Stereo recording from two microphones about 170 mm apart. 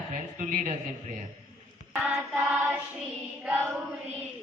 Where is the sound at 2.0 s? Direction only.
10° right (ahead or behind).